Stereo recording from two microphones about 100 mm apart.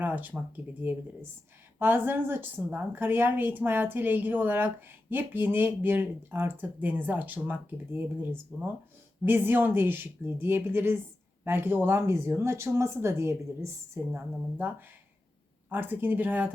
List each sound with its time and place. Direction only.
0.0 s a woman's voice: 20° right (ahead or behind)
15.7 s a woman's voice: 20° right (ahead or behind)